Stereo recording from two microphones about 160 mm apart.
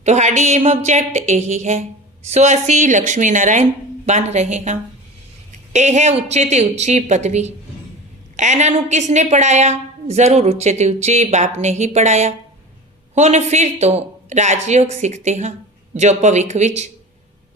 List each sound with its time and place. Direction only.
0.0 s a woman's voice: 45° right (ahead or behind)